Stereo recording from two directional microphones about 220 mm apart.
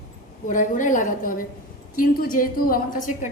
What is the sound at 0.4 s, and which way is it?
A woman's voice, 35° left (ahead or behind).